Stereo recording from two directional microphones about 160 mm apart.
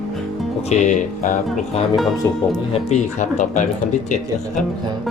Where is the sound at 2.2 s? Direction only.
20° left (ahead or behind).